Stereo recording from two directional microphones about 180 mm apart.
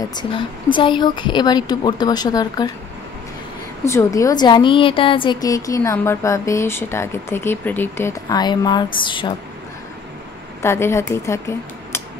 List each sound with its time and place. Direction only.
0.0 s speech: 25° left (ahead or behind)
3.8 s a woman's voice: 15° left (ahead or behind)
10.6 s speech: 15° left (ahead or behind)